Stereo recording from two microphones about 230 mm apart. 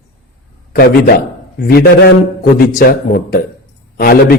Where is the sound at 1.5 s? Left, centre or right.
Left.